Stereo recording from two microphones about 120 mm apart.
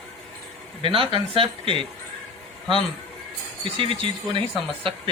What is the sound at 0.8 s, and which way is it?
Speech, 45° right (ahead or behind).